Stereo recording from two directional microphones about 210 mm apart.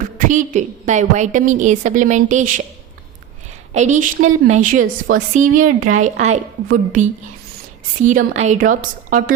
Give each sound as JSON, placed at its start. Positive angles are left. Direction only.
{"t": 0.2, "sound": "a woman's voice", "side_deg": -35}
{"t": 3.8, "sound": "a woman's voice", "side_deg": -35}